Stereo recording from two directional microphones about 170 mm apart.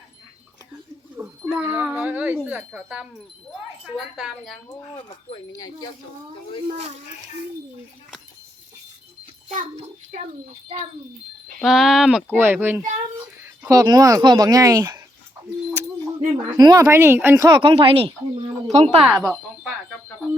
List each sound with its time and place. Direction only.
1.1 s a sound: 10° right (ahead or behind)
2.6 s speech: 5° right (ahead or behind)
4.9 s speech: 25° left (ahead or behind)
9.6 s a child's voice: 50° right (ahead or behind)
11.6 s speech: 5° right (ahead or behind)
13.6 s speech: 20° right (ahead or behind)
16.5 s speech: 20° right (ahead or behind)
18.9 s speech: centre (ahead or behind)